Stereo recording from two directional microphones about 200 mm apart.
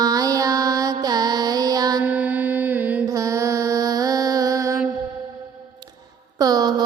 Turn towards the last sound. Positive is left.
turn(degrees=-20)  # may be behind; listen again after turning